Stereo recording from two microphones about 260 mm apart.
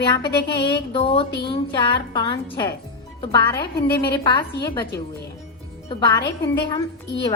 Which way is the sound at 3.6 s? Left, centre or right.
Left.